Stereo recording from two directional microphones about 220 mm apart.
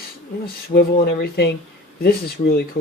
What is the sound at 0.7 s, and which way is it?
Speech, 45° left (ahead or behind).